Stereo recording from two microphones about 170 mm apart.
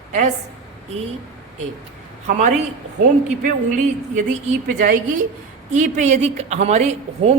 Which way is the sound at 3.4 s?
50° right (ahead or behind).